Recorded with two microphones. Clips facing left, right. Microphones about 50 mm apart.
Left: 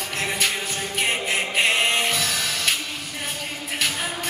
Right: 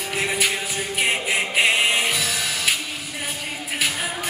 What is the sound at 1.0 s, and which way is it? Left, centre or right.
Music, centre.